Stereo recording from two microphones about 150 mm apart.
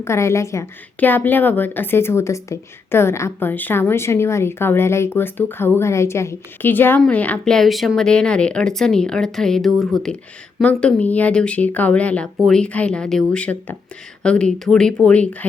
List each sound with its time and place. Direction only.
0.0 s a woman's voice: 20° left (ahead or behind)